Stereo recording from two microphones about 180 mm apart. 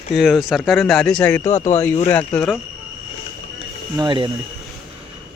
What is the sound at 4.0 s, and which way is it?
Speech, 25° right (ahead or behind).